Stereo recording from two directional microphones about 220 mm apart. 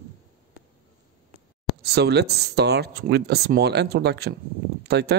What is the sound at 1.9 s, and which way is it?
Speech, 50° right (ahead or behind).